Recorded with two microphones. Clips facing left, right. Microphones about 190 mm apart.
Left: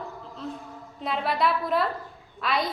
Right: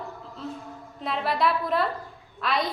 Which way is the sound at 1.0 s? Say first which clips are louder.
Even; centre (ahead or behind).